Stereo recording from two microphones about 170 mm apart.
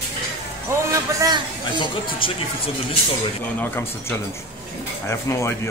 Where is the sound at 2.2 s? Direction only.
30° left (ahead or behind).